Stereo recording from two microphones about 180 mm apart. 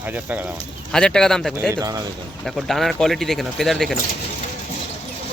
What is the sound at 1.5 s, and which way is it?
Speech, 15° right (ahead or behind).